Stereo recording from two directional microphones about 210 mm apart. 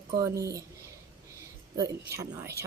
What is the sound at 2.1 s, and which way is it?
Speech, 15° right (ahead or behind).